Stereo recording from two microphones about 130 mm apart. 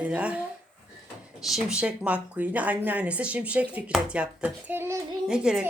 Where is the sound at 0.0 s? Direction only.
10° right (ahead or behind).